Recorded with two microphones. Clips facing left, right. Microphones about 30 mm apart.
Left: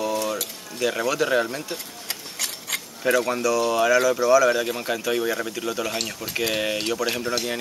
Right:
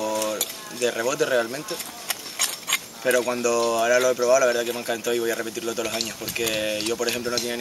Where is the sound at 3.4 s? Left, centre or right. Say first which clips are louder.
Left 1 dB; centre.